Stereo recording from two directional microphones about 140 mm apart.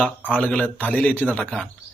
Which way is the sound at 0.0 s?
10° left (ahead or behind).